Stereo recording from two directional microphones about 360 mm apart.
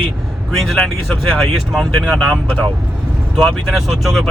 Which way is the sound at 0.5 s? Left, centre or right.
Centre.